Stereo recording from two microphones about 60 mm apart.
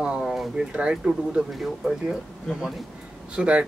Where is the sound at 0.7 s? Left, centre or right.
Centre.